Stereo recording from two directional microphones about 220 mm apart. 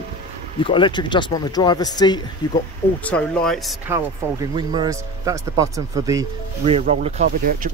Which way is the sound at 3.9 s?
15° right (ahead or behind).